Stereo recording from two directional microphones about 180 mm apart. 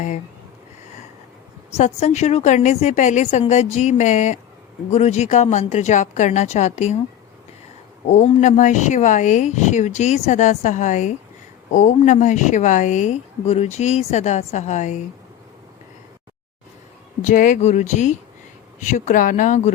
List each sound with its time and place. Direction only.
1.7 s speech: 40° left (ahead or behind)
8.0 s speech: 40° left (ahead or behind)
17.2 s speech: 45° left (ahead or behind)